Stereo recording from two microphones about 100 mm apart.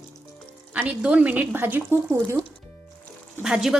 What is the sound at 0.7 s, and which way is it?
Speech, 15° right (ahead or behind).